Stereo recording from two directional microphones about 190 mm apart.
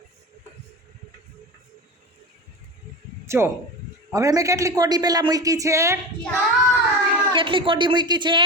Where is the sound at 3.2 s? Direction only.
15° right (ahead or behind).